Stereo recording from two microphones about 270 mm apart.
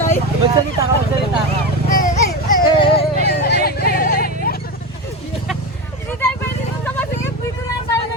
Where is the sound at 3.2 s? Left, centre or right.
Left.